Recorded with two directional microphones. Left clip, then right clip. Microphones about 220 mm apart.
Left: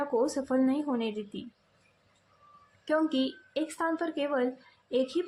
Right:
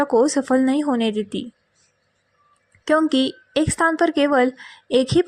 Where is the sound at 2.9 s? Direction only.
35° right (ahead or behind).